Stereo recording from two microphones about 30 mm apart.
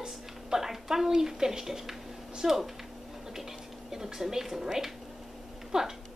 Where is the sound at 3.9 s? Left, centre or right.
Centre.